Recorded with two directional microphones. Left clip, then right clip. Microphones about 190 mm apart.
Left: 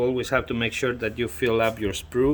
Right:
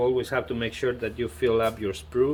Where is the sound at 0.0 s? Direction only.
50° left (ahead or behind).